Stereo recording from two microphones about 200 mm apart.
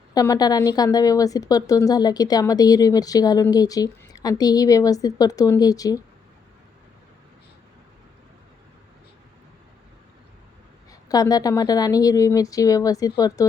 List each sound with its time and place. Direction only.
0.1 s a woman's voice: 20° left (ahead or behind)
11.1 s a woman's voice: 20° left (ahead or behind)